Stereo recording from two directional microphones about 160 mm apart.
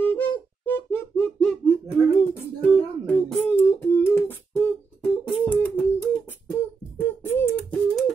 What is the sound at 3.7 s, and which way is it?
Beatboxing, 15° left (ahead or behind).